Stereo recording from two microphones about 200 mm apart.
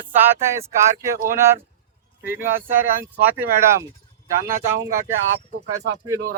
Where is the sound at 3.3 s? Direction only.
15° right (ahead or behind).